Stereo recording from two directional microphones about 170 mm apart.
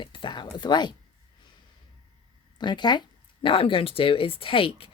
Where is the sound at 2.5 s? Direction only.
25° left (ahead or behind).